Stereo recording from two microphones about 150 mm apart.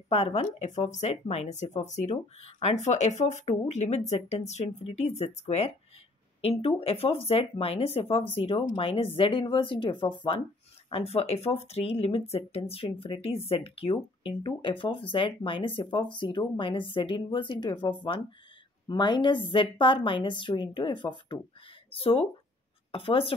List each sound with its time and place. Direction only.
0.1 s a woman's voice: 45° left (ahead or behind)